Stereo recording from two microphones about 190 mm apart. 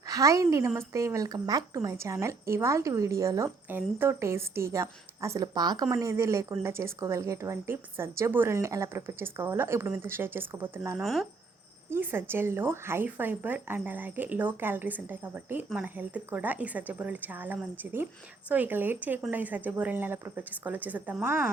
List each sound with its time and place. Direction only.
0.0 s a woman's voice: 15° right (ahead or behind)
11.0 s speech: centre (ahead or behind)
11.9 s a woman's voice: 10° right (ahead or behind)